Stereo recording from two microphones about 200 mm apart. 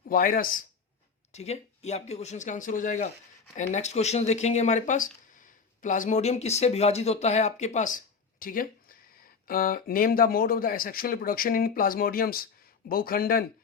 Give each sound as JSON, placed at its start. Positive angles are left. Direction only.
{"t": 0.1, "sound": "speech", "side_deg": 45}
{"t": 1.3, "sound": "speech", "side_deg": 35}